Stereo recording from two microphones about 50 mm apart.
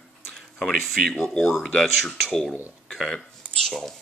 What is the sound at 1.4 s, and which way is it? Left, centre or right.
Speech, centre.